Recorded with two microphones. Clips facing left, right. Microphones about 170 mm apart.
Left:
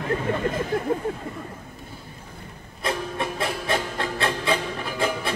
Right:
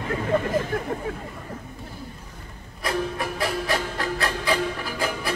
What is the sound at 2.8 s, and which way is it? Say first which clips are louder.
Music: right 1 dB; 25° left (ahead or behind).